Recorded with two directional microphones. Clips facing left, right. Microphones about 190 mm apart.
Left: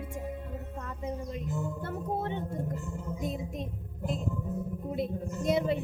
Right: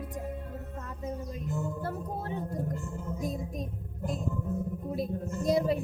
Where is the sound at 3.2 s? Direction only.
25° left (ahead or behind).